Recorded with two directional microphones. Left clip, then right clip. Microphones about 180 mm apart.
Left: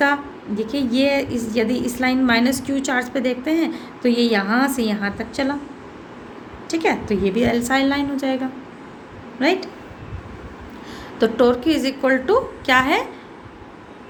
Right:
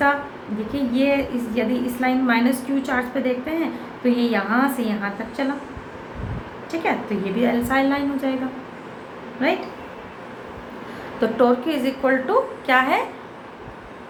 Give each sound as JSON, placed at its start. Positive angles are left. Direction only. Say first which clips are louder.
{"t": 0.7, "sound": "a woman's voice", "louder": "left 1 dB", "side_deg": 55}
{"t": 6.7, "sound": "a woman's voice", "louder": "left 3 dB", "side_deg": 60}
{"t": 9.4, "sound": "a woman's voice", "louder": "left 2 dB", "side_deg": 55}
{"t": 11.2, "sound": "a woman's voice", "louder": "left 2 dB", "side_deg": 50}